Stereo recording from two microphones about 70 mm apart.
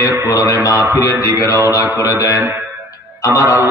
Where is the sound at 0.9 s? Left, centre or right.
Left.